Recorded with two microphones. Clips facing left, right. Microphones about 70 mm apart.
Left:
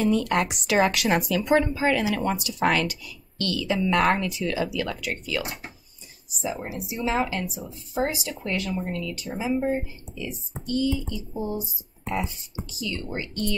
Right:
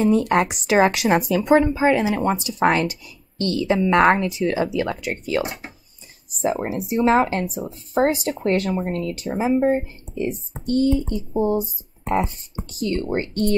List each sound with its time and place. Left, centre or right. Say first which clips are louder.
0.2 s a woman's voice: right 5 dB; right
0.7 s a woman's voice: right 5 dB; right
5.0 s speech: right 6 dB; right